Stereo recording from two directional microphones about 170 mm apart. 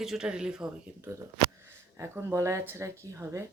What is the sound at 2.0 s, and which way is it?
Speech, 15° right (ahead or behind).